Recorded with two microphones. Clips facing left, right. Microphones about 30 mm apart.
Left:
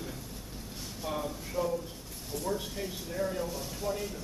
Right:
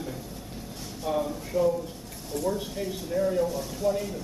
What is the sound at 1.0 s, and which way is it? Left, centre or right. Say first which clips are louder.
Speech: right 7 dB; centre.